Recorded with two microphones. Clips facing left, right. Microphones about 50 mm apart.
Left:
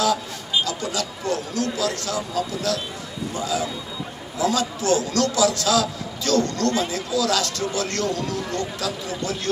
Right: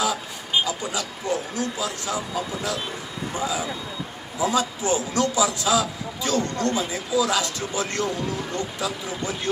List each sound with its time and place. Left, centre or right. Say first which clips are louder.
0.7 s a man's voice: left 1 dB; centre